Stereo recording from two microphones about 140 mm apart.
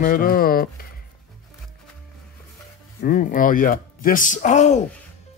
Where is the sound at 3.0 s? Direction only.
75° left (ahead or behind); by 4.8 s 55° left (ahead or behind).